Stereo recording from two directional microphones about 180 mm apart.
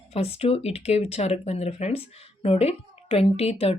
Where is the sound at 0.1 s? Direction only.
35° left (ahead or behind).